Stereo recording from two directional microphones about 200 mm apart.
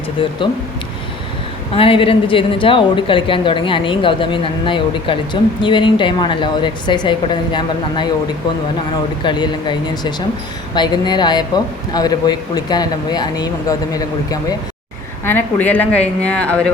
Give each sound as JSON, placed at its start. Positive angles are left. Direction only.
{"t": 0.2, "sound": "a woman's voice", "side_deg": 25}
{"t": 1.7, "sound": "a woman's voice", "side_deg": 25}
{"t": 9.2, "sound": "a woman's voice", "side_deg": 20}